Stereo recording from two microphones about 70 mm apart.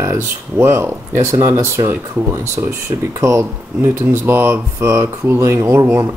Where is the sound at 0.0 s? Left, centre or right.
Right.